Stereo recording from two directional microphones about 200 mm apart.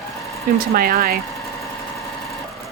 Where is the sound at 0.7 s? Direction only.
50° right (ahead or behind).